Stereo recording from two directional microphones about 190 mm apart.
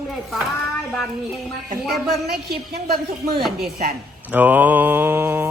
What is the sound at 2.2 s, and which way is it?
Speech, 55° right (ahead or behind).